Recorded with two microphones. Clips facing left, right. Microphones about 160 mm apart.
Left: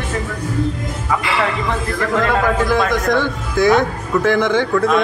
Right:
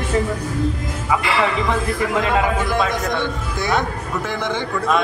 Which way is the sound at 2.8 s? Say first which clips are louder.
Left 5 dB; 90° left.